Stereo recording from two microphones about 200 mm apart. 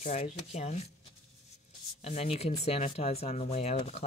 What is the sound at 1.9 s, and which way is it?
Speech, 30° left (ahead or behind).